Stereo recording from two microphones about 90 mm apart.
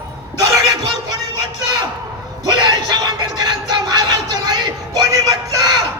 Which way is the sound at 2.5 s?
55° right (ahead or behind).